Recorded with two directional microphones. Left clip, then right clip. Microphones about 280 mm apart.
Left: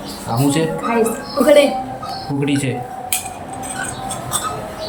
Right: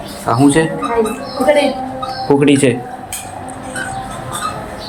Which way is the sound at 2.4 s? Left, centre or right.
Centre.